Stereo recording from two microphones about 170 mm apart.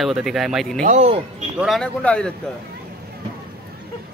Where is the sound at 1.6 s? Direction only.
Centre (ahead or behind).